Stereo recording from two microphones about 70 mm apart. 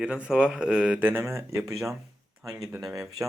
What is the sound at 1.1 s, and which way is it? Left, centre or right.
Speech, right.